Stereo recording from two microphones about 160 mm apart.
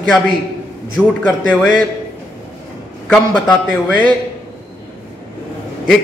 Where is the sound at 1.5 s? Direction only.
Centre (ahead or behind).